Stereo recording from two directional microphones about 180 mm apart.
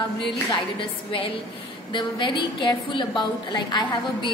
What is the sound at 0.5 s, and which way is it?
A woman's voice, 30° left (ahead or behind).